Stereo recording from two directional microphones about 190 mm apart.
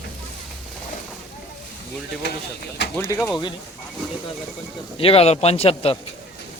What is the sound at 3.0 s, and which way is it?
Speech, 15° left (ahead or behind).